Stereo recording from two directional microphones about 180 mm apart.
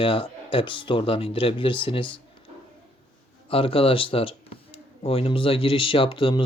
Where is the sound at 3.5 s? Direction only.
30° left (ahead or behind).